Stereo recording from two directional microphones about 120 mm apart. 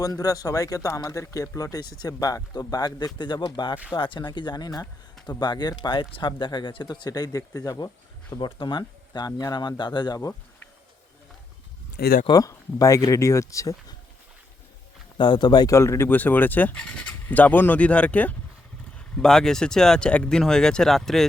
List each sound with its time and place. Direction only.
0.0 s speech: 30° left (ahead or behind)
12.3 s speech: 30° left (ahead or behind)
15.2 s speech: 40° left (ahead or behind); by 21.2 s centre (ahead or behind)